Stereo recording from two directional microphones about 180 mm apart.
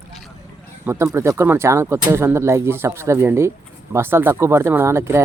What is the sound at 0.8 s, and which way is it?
Speech, 15° right (ahead or behind).